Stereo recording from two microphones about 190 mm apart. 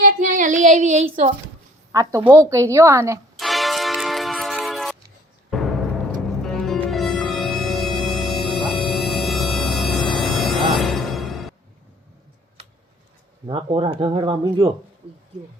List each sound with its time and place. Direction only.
0.0 s child singing: 40° right (ahead or behind)
1.9 s a woman's voice: 15° right (ahead or behind)
3.3 s music: centre (ahead or behind)
13.5 s speech: 25° right (ahead or behind)